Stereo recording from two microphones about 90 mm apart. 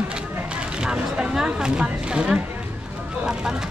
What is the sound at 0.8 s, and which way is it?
Speech, 10° right (ahead or behind).